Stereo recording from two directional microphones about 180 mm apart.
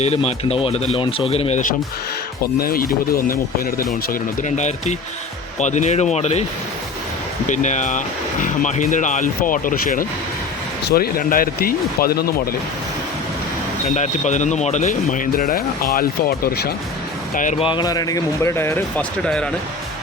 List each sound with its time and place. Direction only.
0.0 s speech: 35° left (ahead or behind)
2.6 s speech: 55° left (ahead or behind)
4.1 s speech: 40° left (ahead or behind)
7.4 s speech: 45° left (ahead or behind)
13.8 s speech: 40° left (ahead or behind); by 16.7 s 60° left (ahead or behind)
17.3 s speech: 45° left (ahead or behind)
17.6 s speech: 25° left (ahead or behind); by 19.5 s 5° left (ahead or behind)